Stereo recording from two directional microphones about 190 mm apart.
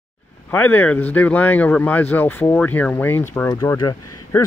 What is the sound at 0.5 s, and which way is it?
Speech, 10° left (ahead or behind).